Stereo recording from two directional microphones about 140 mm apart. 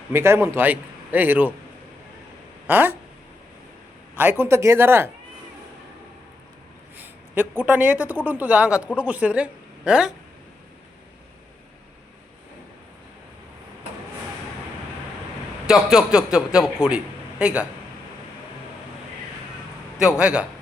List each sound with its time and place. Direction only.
0.1 s a man's voice: 15° right (ahead or behind)
2.6 s a man's voice: 15° right (ahead or behind)
4.2 s a man's voice: 15° right (ahead or behind)
6.9 s a woman's voice: 15° right (ahead or behind)
15.6 s a man's voice: 5° right (ahead or behind)
20.0 s a man's voice: 5° right (ahead or behind)